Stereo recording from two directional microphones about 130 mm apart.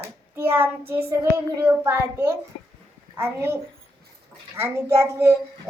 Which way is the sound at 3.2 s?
20° right (ahead or behind).